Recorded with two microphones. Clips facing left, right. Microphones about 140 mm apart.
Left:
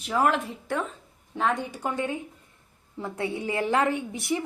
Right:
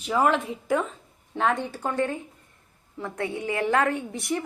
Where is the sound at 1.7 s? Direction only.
15° left (ahead or behind).